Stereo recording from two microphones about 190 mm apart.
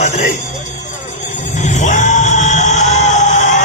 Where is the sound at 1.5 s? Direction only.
40° left (ahead or behind).